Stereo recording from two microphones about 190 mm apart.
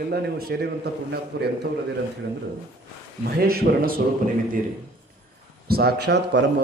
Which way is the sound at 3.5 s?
50° right (ahead or behind).